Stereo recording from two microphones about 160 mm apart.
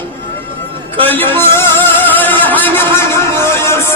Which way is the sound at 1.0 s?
10° left (ahead or behind).